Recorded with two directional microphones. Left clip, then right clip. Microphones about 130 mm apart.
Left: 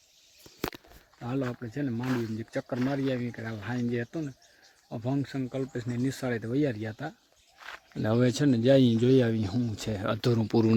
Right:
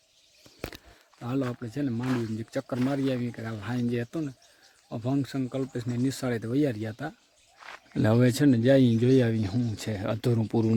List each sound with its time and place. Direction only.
1.6 s speech: 25° right (ahead or behind)
2.0 s speech: 10° left (ahead or behind)
2.4 s speech: 20° right (ahead or behind)
7.6 s a sound: 25° left (ahead or behind)
8.1 s speech: 15° right (ahead or behind); by 10.8 s 5° left (ahead or behind)